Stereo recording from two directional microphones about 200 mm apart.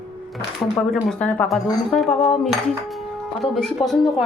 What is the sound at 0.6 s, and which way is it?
Speech, 15° left (ahead or behind).